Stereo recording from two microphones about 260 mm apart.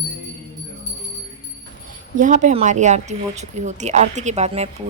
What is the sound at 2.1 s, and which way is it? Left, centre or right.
A woman's voice, right.